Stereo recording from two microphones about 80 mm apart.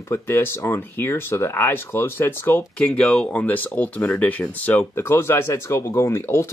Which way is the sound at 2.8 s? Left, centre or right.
Centre.